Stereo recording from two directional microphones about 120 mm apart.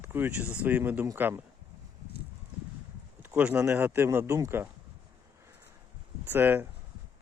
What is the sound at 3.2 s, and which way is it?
Speech, 15° right (ahead or behind).